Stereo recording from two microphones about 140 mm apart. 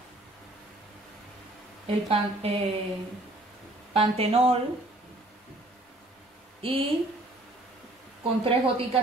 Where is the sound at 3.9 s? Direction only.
40° right (ahead or behind).